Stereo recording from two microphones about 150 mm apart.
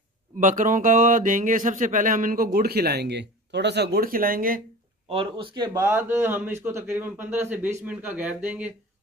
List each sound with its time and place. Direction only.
0.4 s speech: 60° right (ahead or behind)
5.1 s speech: 35° right (ahead or behind)
5.7 s speech: 15° right (ahead or behind)